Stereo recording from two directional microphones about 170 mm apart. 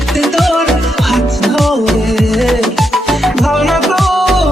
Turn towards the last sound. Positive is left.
turn(degrees=0)  # may be behind; listen again after turning